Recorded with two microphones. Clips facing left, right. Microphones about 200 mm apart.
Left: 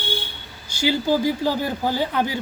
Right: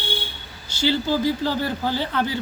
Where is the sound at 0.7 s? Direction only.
15° left (ahead or behind).